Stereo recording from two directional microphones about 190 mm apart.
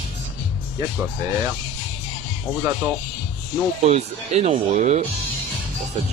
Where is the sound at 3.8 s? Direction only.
35° right (ahead or behind).